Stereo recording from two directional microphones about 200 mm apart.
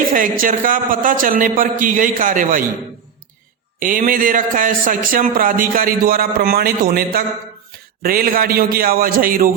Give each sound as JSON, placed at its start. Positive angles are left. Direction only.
{"t": 0.1, "sound": "a man's voice", "side_deg": -40}
{"t": 3.8, "sound": "a man's voice", "side_deg": -45}